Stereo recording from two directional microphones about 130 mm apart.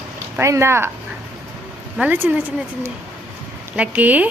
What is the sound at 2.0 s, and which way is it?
Speech, 15° right (ahead or behind).